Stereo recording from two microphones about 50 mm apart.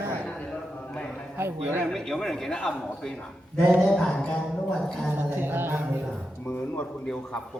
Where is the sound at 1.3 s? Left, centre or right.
Right.